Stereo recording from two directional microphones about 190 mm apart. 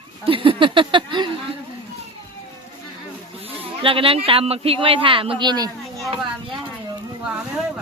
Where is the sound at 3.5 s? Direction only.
30° right (ahead or behind).